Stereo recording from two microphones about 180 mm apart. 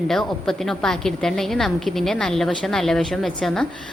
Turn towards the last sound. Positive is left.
turn(degrees=0)  # may be behind; listen again after turning